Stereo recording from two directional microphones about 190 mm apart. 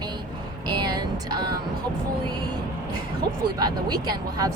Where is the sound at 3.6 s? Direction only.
20° right (ahead or behind).